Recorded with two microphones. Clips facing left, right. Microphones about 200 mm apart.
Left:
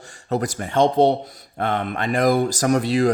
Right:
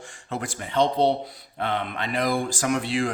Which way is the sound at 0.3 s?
40° left (ahead or behind).